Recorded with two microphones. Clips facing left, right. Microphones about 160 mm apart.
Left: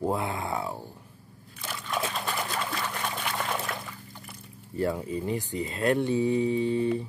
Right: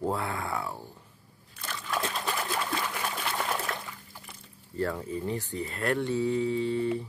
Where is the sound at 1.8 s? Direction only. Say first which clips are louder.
Left 1 dB; centre (ahead or behind).